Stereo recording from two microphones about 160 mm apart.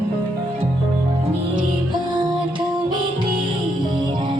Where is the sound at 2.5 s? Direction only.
30° right (ahead or behind).